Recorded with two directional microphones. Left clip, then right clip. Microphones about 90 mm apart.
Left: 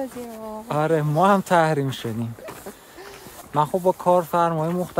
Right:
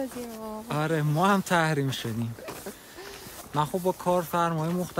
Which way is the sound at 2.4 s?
35° right (ahead or behind).